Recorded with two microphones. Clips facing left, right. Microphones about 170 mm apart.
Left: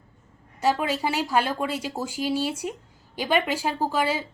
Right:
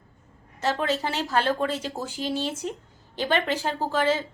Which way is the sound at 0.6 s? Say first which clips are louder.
Left 2 dB; 10° left (ahead or behind).